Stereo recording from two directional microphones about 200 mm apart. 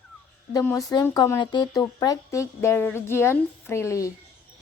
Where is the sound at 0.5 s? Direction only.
15° left (ahead or behind).